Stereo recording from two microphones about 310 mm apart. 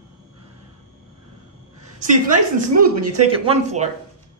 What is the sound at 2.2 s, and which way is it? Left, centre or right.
Speech, right.